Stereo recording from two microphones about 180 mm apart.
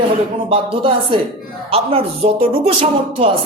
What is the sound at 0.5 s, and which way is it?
A man's voice, 30° right (ahead or behind).